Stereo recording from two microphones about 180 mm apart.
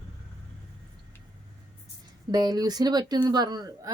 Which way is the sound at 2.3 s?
20° right (ahead or behind).